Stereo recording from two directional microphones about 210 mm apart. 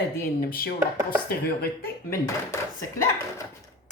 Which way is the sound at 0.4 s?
45° left (ahead or behind).